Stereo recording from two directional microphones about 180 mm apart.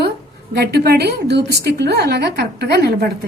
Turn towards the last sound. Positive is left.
turn(degrees=-65)  # may be behind; listen again after turning